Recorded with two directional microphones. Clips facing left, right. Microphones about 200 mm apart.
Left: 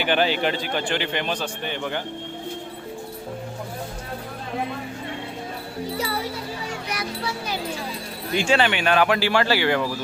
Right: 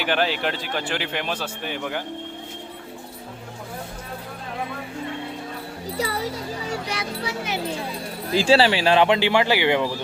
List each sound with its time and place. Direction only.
0.0 s speech: centre (ahead or behind)
6.9 s speech: 25° right (ahead or behind)
8.3 s speech: 35° right (ahead or behind)